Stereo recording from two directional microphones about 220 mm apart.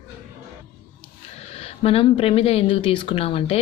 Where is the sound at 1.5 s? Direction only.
25° left (ahead or behind).